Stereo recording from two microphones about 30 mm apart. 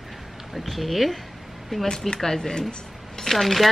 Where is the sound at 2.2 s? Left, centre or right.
Centre.